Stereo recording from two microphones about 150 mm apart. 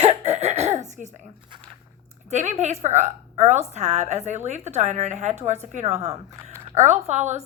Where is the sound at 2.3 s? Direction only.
50° right (ahead or behind).